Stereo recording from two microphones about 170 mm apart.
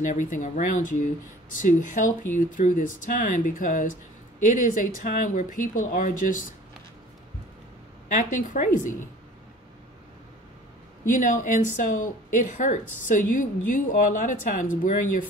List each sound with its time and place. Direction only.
0.0 s speech: 45° left (ahead or behind)
8.1 s speech: 50° left (ahead or behind)
11.1 s speech: 50° left (ahead or behind)